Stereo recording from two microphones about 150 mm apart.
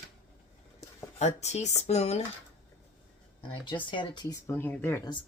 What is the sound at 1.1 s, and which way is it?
Speech, 50° left (ahead or behind).